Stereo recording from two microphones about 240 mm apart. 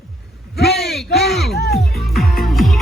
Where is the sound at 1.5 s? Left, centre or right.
Left.